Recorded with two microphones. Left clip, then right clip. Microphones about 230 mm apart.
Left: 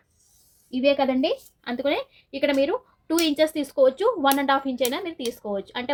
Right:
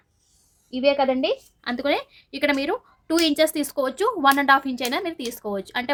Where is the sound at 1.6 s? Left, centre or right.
Right.